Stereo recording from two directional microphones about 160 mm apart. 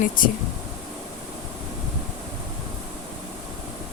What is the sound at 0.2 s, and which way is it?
Speech, 60° left (ahead or behind).